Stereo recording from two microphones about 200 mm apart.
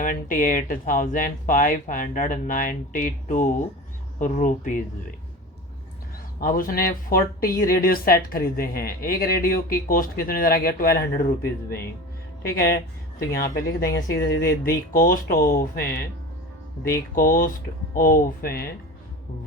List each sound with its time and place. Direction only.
0.0 s speech: 40° left (ahead or behind)
6.4 s speech: 45° left (ahead or behind)
13.1 s speech: 45° left (ahead or behind)
13.9 s speech: 15° left (ahead or behind)
14.3 s speech: 50° left (ahead or behind)
17.2 s speech: 45° left (ahead or behind)